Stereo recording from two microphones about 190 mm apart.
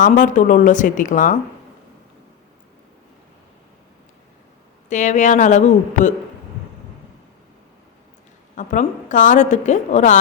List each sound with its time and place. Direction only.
0.0 s speech: 45° left (ahead or behind)
4.9 s a woman's voice: 40° left (ahead or behind)
8.5 s a woman's voice: 40° left (ahead or behind)